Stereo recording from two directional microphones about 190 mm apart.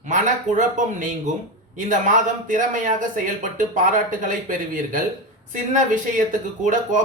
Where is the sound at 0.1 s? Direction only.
40° right (ahead or behind).